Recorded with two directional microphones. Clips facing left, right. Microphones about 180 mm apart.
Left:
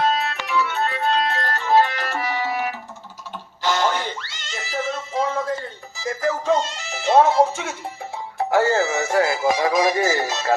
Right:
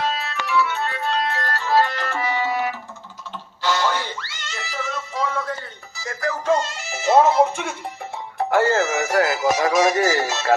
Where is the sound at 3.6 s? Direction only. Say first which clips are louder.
Left 1 dB; 15° left (ahead or behind).